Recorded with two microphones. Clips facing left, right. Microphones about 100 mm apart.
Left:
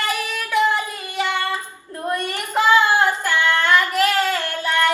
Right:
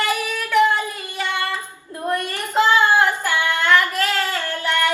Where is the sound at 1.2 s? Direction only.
20° left (ahead or behind).